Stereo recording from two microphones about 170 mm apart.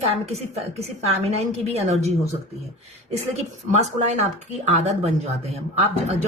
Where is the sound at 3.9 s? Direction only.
40° right (ahead or behind).